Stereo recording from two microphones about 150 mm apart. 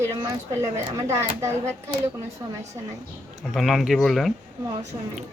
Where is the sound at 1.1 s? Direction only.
15° right (ahead or behind).